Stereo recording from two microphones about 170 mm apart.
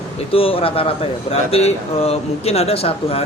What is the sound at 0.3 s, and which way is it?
Speech, 35° left (ahead or behind).